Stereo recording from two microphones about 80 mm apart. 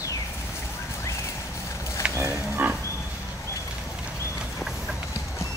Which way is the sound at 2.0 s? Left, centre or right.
Centre.